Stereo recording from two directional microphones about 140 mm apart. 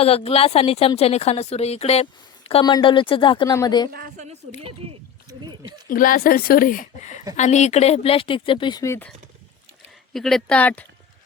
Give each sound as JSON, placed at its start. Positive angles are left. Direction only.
{"t": 0.0, "sound": "a woman's voice", "side_deg": 45}
{"t": 2.5, "sound": "speech", "side_deg": 35}
{"t": 3.9, "sound": "a woman's voice", "side_deg": -90}
{"t": 5.9, "sound": "speech", "side_deg": 90}
{"t": 7.3, "sound": "a woman's voice", "side_deg": 55}
{"t": 8.8, "sound": "speech", "side_deg": 20}
{"t": 10.1, "sound": "speech", "side_deg": 0}